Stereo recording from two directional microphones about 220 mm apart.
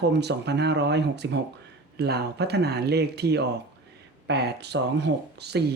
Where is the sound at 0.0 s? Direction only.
50° right (ahead or behind).